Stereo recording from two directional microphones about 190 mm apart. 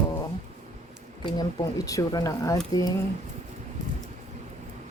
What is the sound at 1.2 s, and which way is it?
A woman's voice, 20° left (ahead or behind).